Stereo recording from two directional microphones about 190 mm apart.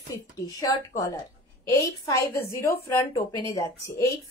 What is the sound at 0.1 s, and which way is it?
A woman's voice, 20° left (ahead or behind).